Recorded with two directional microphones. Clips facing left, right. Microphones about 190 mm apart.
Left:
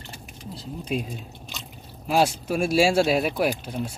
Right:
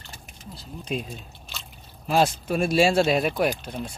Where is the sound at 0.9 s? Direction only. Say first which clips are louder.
Left 1 dB; 5° left (ahead or behind).